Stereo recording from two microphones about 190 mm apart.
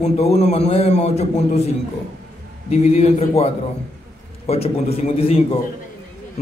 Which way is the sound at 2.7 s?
35° left (ahead or behind).